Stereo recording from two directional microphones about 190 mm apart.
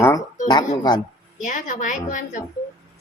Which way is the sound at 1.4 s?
45° left (ahead or behind).